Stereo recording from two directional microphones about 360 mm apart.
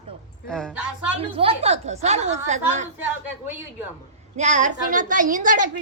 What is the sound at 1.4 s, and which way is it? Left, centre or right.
A woman's voice, centre.